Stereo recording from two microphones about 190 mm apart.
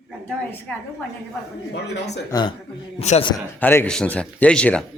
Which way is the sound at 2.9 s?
30° left (ahead or behind).